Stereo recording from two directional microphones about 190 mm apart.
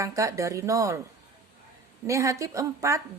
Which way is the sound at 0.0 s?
15° right (ahead or behind).